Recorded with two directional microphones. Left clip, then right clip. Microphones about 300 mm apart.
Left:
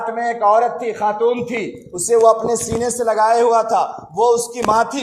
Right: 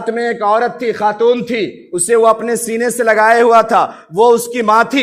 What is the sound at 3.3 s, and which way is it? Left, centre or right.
A man's voice, right.